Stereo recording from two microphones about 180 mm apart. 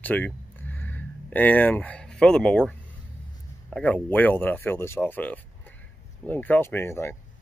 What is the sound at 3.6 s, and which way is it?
Speech, 5° left (ahead or behind).